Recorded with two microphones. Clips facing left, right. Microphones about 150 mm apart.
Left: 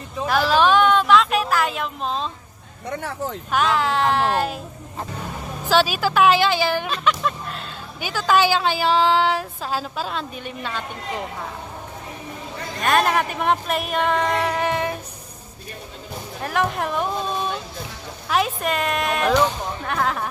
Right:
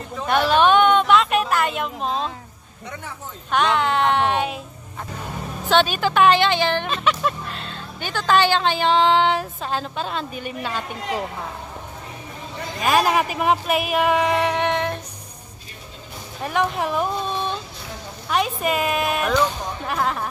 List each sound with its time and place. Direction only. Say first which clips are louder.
0.3 s a sound: right 1 dB; centre (ahead or behind)
3.0 s speech: left 8 dB; 75° left (ahead or behind)
3.5 s speech: right 1 dB; centre (ahead or behind)
5.7 s speech: even; 5° left (ahead or behind)
12.8 s speech: right 1 dB; 5° right (ahead or behind)
16.4 s speech: right 1 dB; centre (ahead or behind)
18.3 s speech: even; centre (ahead or behind)